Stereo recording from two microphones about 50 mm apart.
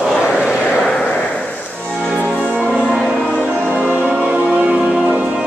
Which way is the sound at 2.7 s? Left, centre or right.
Centre.